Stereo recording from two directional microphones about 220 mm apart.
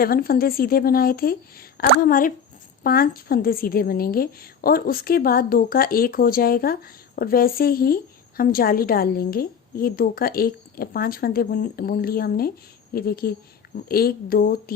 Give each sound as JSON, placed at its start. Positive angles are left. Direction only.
{"t": 0.0, "sound": "a woman's voice", "side_deg": 40}